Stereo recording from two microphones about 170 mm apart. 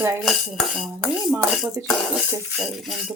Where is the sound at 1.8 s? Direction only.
15° right (ahead or behind).